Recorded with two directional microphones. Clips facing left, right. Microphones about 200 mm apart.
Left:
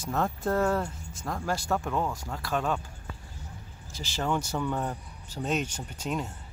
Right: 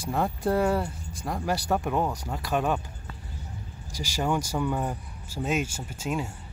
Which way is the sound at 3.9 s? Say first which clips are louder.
Right 2 dB; 10° right (ahead or behind).